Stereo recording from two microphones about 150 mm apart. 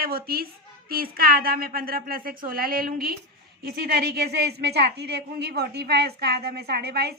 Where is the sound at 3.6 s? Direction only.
90° right.